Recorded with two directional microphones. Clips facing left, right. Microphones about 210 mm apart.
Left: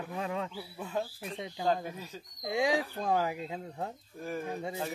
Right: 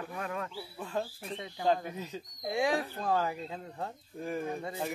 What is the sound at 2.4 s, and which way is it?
Speech, 20° left (ahead or behind).